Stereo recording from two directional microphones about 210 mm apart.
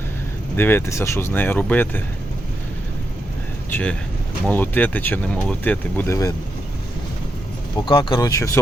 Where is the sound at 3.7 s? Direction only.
5° left (ahead or behind).